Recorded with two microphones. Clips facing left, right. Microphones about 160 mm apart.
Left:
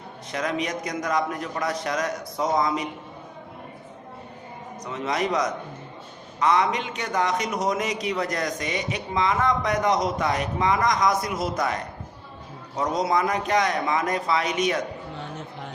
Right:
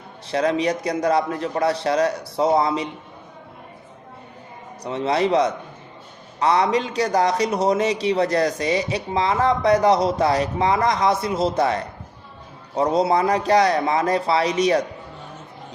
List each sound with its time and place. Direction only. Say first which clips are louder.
0.3 s a man's voice: right 7 dB; 30° right (ahead or behind)
4.8 s a man's voice: right 6 dB; 30° right (ahead or behind)